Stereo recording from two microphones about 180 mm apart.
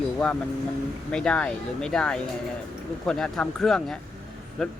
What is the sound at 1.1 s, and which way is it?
Speech, 5° left (ahead or behind).